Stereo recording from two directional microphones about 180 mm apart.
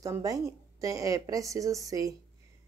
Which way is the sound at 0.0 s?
20° right (ahead or behind).